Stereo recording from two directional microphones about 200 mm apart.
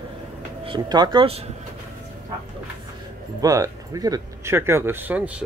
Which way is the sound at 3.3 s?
15° right (ahead or behind).